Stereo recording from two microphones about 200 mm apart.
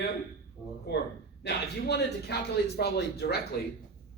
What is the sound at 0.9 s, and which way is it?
Speech, 55° left (ahead or behind).